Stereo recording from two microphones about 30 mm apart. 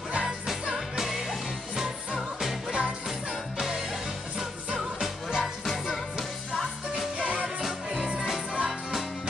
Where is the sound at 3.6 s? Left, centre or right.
Centre.